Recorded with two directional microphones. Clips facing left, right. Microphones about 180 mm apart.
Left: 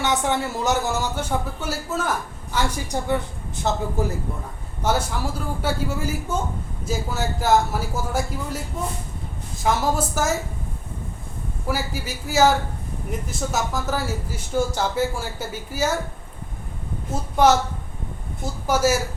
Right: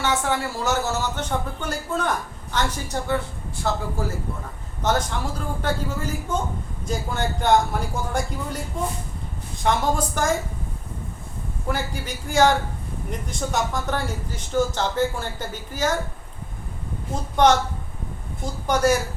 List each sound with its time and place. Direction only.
0.0 s a man's voice: 20° left (ahead or behind)
4.8 s speech: 10° left (ahead or behind)
11.7 s speech: 5° left (ahead or behind)
17.1 s speech: 5° left (ahead or behind)